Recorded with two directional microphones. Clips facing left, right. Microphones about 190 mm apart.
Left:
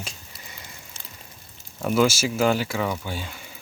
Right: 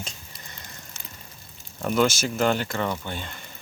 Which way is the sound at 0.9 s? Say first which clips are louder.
Right 1 dB; 35° left (ahead or behind).